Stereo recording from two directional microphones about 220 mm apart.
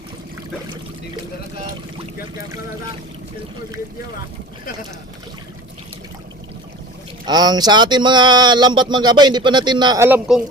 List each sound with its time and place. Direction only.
7.3 s speech: 20° right (ahead or behind)